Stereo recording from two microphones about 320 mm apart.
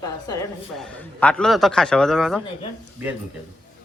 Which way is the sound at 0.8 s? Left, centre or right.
Centre.